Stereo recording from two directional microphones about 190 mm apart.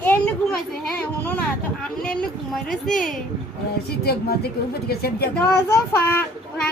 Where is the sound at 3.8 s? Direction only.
55° left (ahead or behind).